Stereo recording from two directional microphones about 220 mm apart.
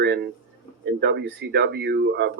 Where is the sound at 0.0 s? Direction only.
50° right (ahead or behind).